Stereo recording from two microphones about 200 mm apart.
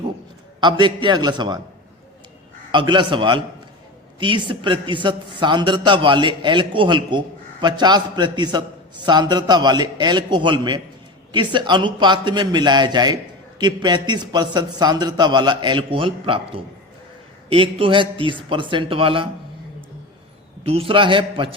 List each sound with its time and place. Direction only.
0.6 s a man's voice: 25° right (ahead or behind)
2.7 s a man's voice: 25° right (ahead or behind)
20.7 s a man's voice: 30° right (ahead or behind)